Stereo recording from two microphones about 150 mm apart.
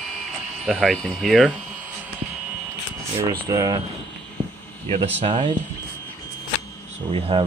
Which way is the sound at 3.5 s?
25° right (ahead or behind).